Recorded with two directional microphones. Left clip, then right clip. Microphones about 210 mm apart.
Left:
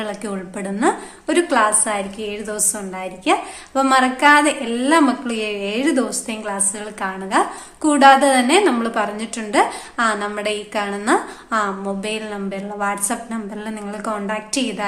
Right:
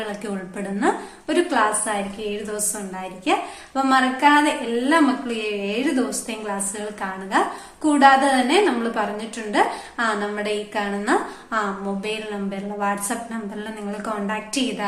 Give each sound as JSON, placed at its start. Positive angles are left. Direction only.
{"t": 0.0, "sound": "a woman's voice", "side_deg": 35}